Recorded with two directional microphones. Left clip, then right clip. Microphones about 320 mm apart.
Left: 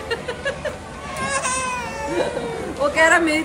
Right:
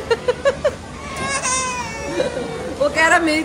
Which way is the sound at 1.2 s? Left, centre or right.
Centre.